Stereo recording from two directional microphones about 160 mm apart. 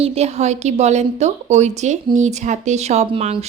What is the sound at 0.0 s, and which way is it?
Speech, 40° right (ahead or behind).